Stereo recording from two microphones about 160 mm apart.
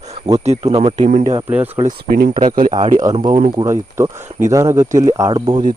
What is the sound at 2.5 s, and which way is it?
Speech, 55° right (ahead or behind).